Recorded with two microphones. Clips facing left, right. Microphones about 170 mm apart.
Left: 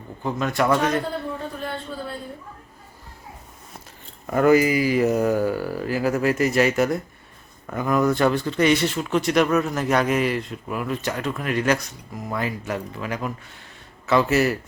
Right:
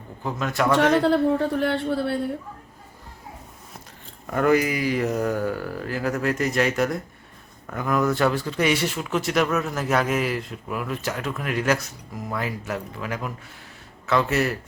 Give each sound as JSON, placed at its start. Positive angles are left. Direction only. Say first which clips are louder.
{"t": 0.2, "sound": "speech", "louder": "left 2 dB", "side_deg": 0}
{"t": 1.0, "sound": "a woman's voice", "louder": "right 10 dB", "side_deg": -80}
{"t": 4.3, "sound": "speech", "louder": "left 3 dB", "side_deg": 5}